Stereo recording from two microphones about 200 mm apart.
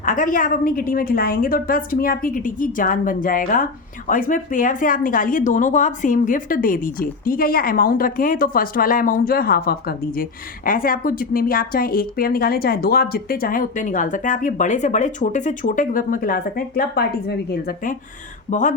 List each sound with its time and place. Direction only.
0.0 s a woman's voice: 40° left (ahead or behind)